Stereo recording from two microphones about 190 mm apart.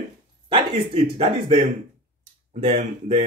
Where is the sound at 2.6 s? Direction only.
30° right (ahead or behind).